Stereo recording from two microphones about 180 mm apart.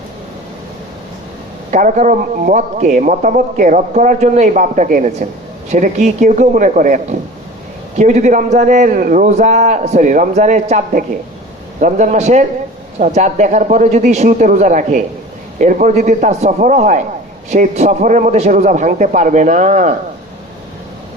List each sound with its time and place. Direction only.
1.7 s a man's voice: 45° right (ahead or behind)